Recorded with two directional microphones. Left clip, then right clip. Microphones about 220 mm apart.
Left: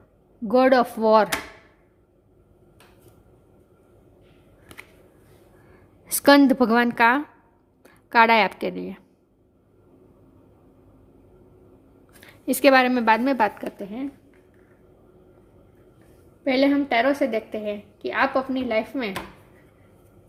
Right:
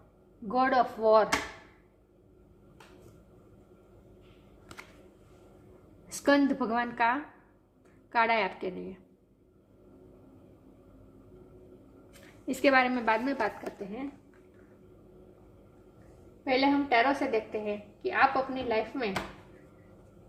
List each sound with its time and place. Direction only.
0.4 s a woman's voice: 55° left (ahead or behind)
6.2 s a woman's voice: 45° left (ahead or behind)
12.5 s a woman's voice: 45° left (ahead or behind)
16.4 s a woman's voice: 50° left (ahead or behind)